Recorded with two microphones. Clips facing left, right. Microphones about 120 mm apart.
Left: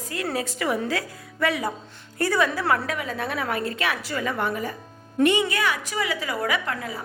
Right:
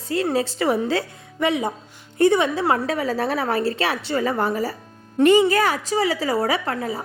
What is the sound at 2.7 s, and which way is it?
A woman's voice, 35° right (ahead or behind).